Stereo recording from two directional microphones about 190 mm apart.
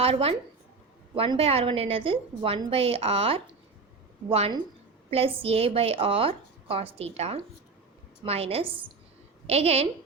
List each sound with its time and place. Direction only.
0.0 s a woman's voice: 30° right (ahead or behind)